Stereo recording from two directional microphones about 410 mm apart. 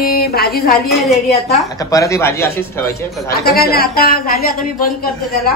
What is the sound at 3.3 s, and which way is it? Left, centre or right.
A woman's voice, left.